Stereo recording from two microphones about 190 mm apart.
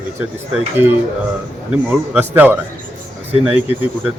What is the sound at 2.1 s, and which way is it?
Speech, 10° right (ahead or behind).